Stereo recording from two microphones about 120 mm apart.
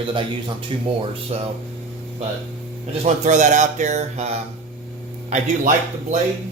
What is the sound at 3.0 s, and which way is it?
Speech, 85° right.